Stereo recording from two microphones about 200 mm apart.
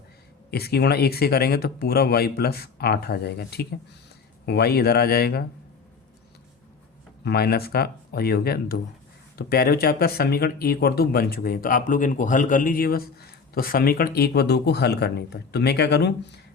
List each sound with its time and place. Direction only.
0.5 s speech: 55° left (ahead or behind)
7.3 s speech: 50° left (ahead or behind)